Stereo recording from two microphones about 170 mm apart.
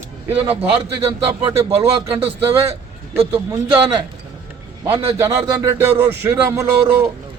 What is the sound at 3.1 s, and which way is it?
Speech, 15° right (ahead or behind).